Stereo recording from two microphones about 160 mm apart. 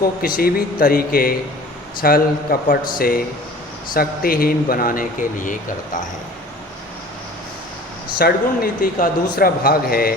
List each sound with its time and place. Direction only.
0.0 s speech: 65° left (ahead or behind)
8.2 s speech: 70° left (ahead or behind)